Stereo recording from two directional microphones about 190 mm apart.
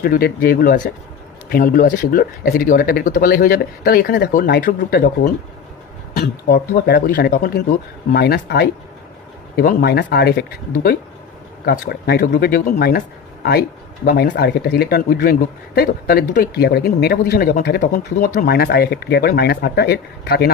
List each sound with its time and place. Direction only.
0.0 s speech: 50° left (ahead or behind)